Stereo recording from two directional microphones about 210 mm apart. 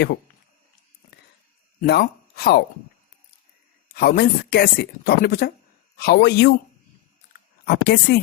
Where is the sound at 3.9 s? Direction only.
45° left (ahead or behind).